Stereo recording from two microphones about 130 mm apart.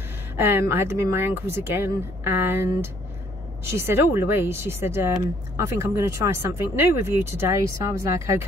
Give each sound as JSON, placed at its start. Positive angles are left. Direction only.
{"t": 0.4, "sound": "speech", "side_deg": -20}